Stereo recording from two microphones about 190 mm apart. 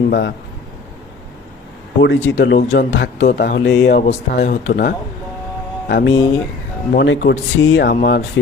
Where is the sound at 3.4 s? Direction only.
60° left (ahead or behind).